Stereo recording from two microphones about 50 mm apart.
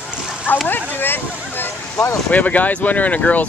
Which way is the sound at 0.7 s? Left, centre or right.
Left.